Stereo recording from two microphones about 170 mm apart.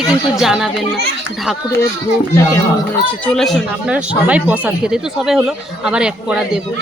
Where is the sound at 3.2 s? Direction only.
5° left (ahead or behind).